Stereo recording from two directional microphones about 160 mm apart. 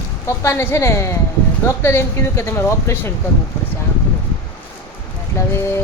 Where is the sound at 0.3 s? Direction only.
15° left (ahead or behind).